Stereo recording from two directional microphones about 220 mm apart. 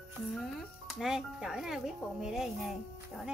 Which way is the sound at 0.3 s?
Centre (ahead or behind).